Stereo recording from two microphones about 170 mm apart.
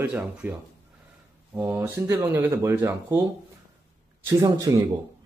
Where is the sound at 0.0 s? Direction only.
10° right (ahead or behind).